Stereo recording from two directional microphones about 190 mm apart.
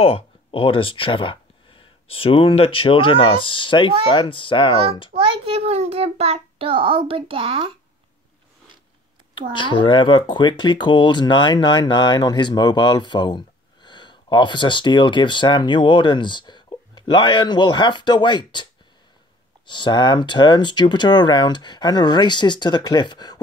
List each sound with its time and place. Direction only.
0.0 s speech: 30° left (ahead or behind)
5.4 s child singing: 30° right (ahead or behind)
9.5 s speech: 25° left (ahead or behind)